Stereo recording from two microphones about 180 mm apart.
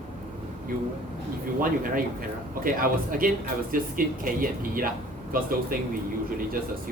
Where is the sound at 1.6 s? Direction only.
50° right (ahead or behind).